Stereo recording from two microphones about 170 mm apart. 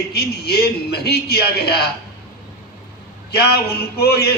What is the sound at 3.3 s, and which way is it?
A man's voice, 70° left (ahead or behind).